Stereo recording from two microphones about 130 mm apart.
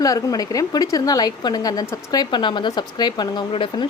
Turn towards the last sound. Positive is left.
turn(degrees=40)  # may be behind; listen again after turning